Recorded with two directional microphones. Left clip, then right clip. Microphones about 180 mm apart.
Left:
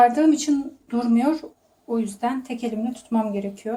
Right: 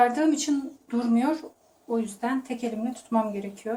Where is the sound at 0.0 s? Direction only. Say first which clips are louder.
Left 5 dB; 30° left (ahead or behind).